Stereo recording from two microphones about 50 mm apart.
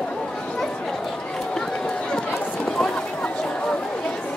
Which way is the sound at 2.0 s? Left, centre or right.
Centre.